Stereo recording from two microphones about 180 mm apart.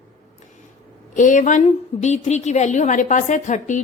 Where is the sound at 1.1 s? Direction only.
45° left (ahead or behind).